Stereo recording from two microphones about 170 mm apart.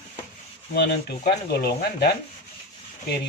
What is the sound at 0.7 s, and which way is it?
Speech, 70° left (ahead or behind).